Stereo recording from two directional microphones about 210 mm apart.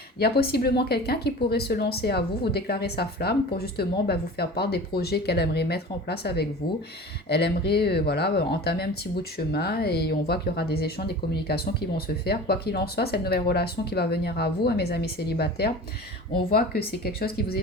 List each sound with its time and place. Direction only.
0.2 s speech: 50° left (ahead or behind)